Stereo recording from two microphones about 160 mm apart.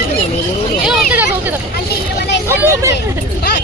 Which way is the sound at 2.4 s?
15° right (ahead or behind).